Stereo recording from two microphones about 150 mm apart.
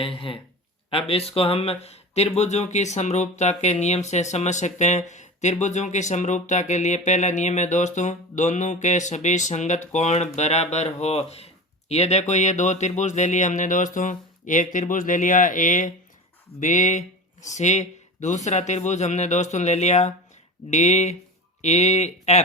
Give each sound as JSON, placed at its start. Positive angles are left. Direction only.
{"t": 0.0, "sound": "speech", "side_deg": 35}